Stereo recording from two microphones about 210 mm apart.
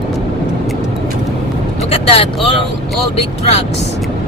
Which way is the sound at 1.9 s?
25° left (ahead or behind).